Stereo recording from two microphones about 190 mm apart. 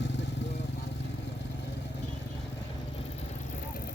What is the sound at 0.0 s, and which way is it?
Vehicle, 65° left (ahead or behind).